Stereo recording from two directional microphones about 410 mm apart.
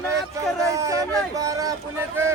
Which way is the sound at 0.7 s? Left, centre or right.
Centre.